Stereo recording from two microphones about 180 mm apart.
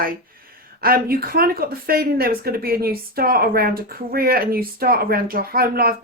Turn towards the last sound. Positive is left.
turn(degrees=-55)  # may be behind; listen again after turning